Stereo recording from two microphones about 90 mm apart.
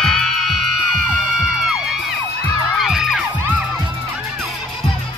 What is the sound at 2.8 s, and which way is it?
Music, 5° right (ahead or behind).